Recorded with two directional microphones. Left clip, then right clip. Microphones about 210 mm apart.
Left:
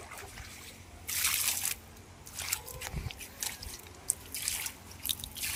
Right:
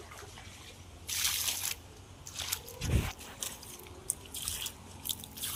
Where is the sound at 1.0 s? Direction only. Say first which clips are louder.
Even; centre (ahead or behind).